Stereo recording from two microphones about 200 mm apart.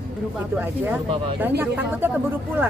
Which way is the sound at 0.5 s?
10° right (ahead or behind).